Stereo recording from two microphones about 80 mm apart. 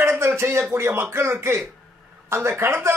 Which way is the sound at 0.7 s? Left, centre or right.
Right.